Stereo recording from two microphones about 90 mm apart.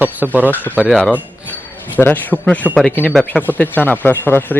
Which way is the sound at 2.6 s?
20° right (ahead or behind).